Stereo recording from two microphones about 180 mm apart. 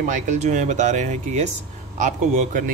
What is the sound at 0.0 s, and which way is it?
Speech, 40° right (ahead or behind).